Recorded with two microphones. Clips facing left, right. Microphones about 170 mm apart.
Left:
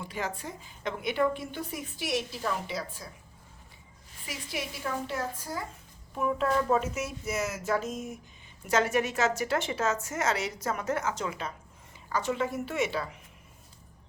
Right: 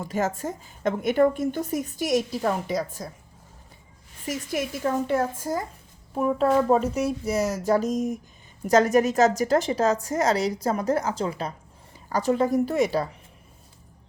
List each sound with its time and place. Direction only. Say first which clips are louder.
0.0 s a woman's voice: right 9 dB; 45° right (ahead or behind)
4.3 s a woman's voice: right 9 dB; 45° right (ahead or behind)